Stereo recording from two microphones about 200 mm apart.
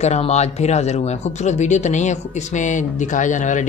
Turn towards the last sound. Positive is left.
turn(degrees=40)  # may be behind; listen again after turning